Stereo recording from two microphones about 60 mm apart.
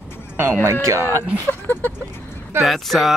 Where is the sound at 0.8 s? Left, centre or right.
Right.